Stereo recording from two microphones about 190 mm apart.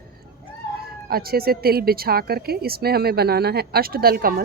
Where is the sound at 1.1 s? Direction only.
55° right (ahead or behind).